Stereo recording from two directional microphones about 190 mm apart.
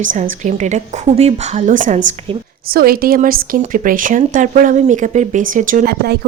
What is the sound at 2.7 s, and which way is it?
Speech, 50° right (ahead or behind).